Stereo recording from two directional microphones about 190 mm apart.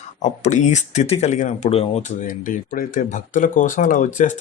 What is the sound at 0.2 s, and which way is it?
Speech, 40° left (ahead or behind).